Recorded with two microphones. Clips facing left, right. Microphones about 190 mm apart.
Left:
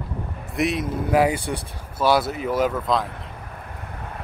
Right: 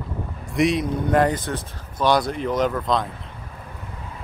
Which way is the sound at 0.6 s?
Centre (ahead or behind).